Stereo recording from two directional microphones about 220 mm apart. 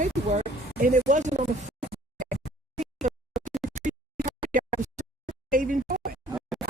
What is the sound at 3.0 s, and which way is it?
Scratch, 35° right (ahead or behind).